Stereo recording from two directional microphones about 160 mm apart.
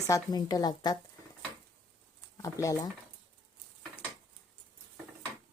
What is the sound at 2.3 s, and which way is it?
Speech, 20° left (ahead or behind).